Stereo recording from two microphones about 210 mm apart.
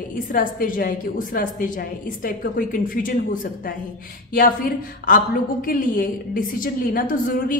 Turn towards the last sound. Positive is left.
turn(degrees=40)  # may be behind; listen again after turning